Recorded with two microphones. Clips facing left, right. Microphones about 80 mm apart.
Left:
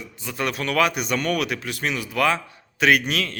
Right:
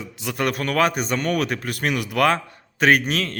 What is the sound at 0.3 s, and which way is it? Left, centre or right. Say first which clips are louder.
A man's voice: right 1 dB; right.